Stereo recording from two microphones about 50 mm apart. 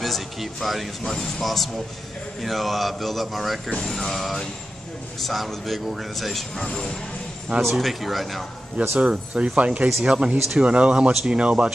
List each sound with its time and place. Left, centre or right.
0.0 s speech: centre
8.9 s speech: centre